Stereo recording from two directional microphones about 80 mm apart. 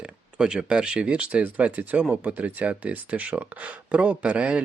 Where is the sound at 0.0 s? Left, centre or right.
Centre.